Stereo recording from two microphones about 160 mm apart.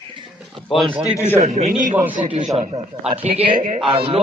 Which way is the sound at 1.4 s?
45° right (ahead or behind).